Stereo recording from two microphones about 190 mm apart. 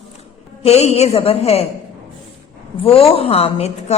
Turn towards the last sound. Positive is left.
turn(degrees=35)  # may be behind; listen again after turning